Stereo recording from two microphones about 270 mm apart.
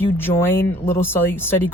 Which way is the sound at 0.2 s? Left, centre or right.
Centre.